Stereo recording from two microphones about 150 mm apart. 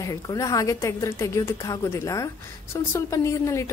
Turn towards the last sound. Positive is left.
turn(degrees=20)  # may be behind; listen again after turning